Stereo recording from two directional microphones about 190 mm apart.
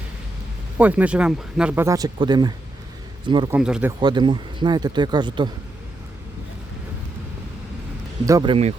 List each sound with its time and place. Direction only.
0.8 s speech: 10° right (ahead or behind); by 3.5 s 25° right (ahead or behind)
3.5 s speech: 5° right (ahead or behind)
4.0 s speech: 25° right (ahead or behind)
8.2 s speech: 20° right (ahead or behind)